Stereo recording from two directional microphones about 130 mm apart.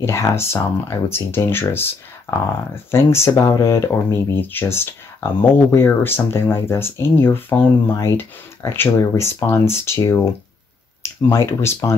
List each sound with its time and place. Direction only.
0.0 s speech: 20° left (ahead or behind)